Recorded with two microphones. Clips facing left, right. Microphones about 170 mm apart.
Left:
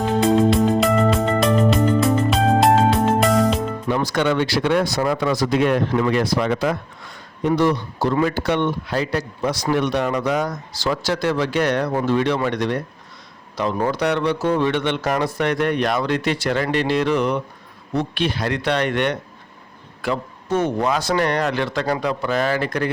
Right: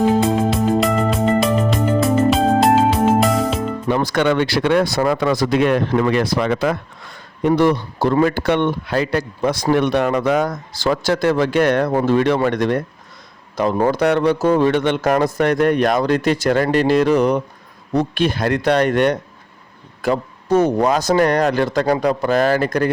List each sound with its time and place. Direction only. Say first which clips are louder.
0.0 s music: right 1 dB; centre (ahead or behind)
3.8 s speech: right 3 dB; 65° right (ahead or behind)
7.4 s a man's voice: right 3 dB; 55° right (ahead or behind)